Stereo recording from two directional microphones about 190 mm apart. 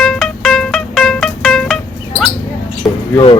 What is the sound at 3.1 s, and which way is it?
Speech, 25° left (ahead or behind).